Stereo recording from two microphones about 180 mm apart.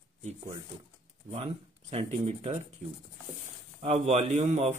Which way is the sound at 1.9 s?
35° right (ahead or behind).